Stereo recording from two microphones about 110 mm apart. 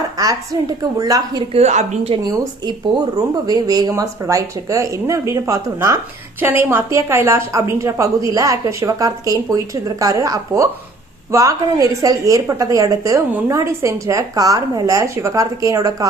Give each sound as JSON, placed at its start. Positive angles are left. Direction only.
{"t": 0.2, "sound": "a woman's voice", "side_deg": -35}
{"t": 1.5, "sound": "a woman's voice", "side_deg": -90}
{"t": 2.2, "sound": "a woman's voice", "side_deg": -35}
{"t": 6.4, "sound": "a woman's voice", "side_deg": -20}